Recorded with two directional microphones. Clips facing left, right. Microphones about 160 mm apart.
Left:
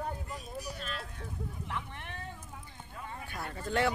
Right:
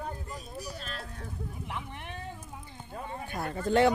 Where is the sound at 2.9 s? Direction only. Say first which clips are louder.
Right 5 dB; 30° right (ahead or behind).